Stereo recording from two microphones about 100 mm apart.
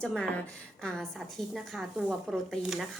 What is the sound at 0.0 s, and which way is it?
A woman's voice, 10° left (ahead or behind).